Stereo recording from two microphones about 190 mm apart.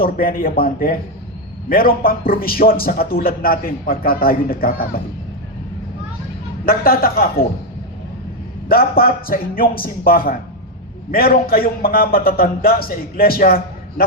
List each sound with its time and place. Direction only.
0.0 s a man's voice: 50° left (ahead or behind)
6.7 s a man's voice: 50° left (ahead or behind)
8.7 s a man's voice: 50° left (ahead or behind)